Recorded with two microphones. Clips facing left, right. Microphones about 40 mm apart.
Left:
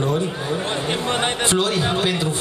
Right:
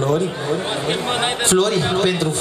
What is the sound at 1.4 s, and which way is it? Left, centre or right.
Speech, centre.